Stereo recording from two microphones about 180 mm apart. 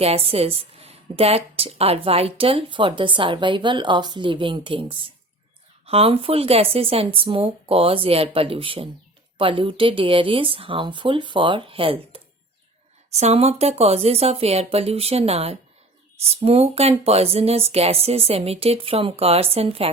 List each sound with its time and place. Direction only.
0.0 s a woman's voice: 35° right (ahead or behind)